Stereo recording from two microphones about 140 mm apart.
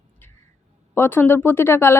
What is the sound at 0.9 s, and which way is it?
Speech, 15° left (ahead or behind).